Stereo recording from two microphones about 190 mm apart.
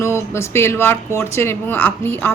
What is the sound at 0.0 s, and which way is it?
Speech, 15° left (ahead or behind).